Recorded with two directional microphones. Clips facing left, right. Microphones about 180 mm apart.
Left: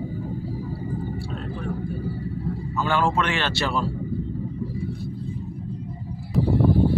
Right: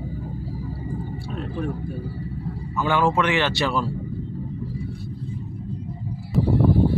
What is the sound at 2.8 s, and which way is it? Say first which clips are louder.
Speech: right 2 dB; 15° right (ahead or behind).